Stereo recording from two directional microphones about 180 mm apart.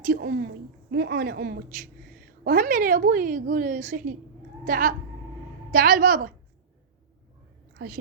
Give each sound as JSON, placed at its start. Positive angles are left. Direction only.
{"t": 0.0, "sound": "speech", "side_deg": -55}
{"t": 0.9, "sound": "a woman's voice", "side_deg": -65}